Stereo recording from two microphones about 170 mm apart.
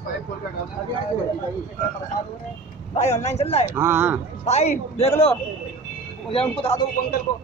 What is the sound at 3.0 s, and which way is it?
Speech, 40° left (ahead or behind).